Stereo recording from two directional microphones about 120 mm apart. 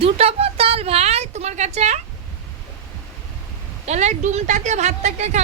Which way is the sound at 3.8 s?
70° right (ahead or behind).